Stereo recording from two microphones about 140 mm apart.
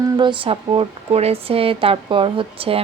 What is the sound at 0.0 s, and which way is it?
Speech, 35° right (ahead or behind).